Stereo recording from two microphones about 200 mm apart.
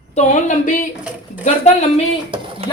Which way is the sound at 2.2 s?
25° right (ahead or behind).